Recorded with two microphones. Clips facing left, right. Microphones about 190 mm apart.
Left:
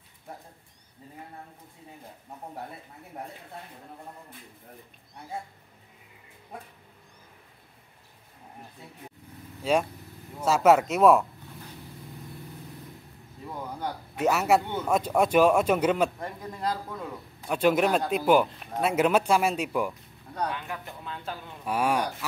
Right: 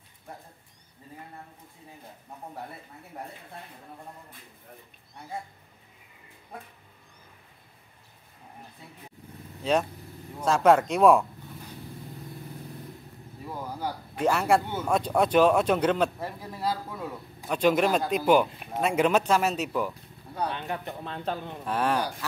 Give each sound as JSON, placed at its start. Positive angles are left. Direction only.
{"t": 9.6, "sound": "speech", "side_deg": 10}
{"t": 13.5, "sound": "a sound", "side_deg": -5}
{"t": 14.1, "sound": "speech", "side_deg": 5}
{"t": 16.2, "sound": "a man's voice", "side_deg": -5}
{"t": 17.5, "sound": "speech", "side_deg": 5}
{"t": 20.4, "sound": "speech", "side_deg": -30}
{"t": 21.6, "sound": "speech", "side_deg": 10}